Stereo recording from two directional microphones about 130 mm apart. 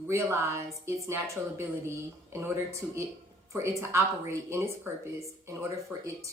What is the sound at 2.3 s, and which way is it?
Speech, 20° right (ahead or behind).